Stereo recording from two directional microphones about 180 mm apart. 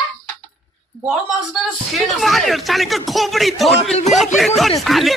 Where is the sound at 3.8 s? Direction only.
35° left (ahead or behind).